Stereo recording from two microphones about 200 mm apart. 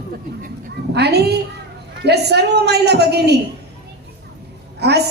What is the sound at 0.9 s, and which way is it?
A woman's voice, 55° right (ahead or behind).